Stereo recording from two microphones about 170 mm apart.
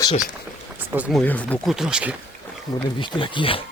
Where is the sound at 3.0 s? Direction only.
30° left (ahead or behind).